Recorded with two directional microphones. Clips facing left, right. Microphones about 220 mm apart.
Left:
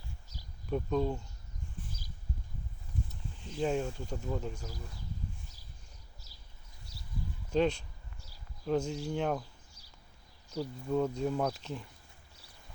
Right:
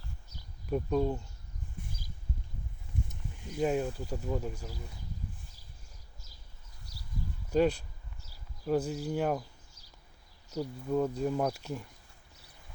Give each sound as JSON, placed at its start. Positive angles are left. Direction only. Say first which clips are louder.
{"t": 0.7, "sound": "speech", "louder": "right 2 dB", "side_deg": -10}
{"t": 3.1, "sound": "speech", "louder": "right 2 dB", "side_deg": -10}
{"t": 6.9, "sound": "a sound", "louder": "right 1 dB", "side_deg": 25}
{"t": 7.5, "sound": "speech", "louder": "right 2 dB", "side_deg": -5}
{"t": 8.9, "sound": "speech", "louder": "right 2 dB", "side_deg": -5}
{"t": 10.5, "sound": "speech", "louder": "right 1 dB", "side_deg": -10}